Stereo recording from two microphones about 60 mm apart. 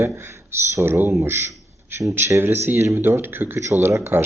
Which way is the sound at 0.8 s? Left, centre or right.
Right.